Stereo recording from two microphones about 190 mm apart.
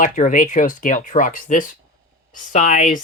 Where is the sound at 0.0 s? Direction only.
45° left (ahead or behind).